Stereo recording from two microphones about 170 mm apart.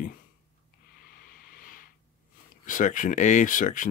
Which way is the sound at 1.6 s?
55° left (ahead or behind).